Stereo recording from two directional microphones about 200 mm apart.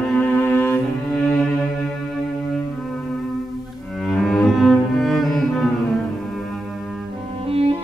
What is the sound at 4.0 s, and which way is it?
Cello, centre (ahead or behind).